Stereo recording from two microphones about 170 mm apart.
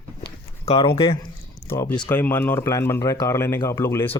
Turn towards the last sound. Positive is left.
turn(degrees=15)  # may be behind; listen again after turning